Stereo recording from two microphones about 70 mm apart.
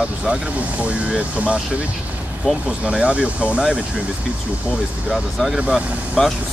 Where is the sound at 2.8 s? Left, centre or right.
Centre.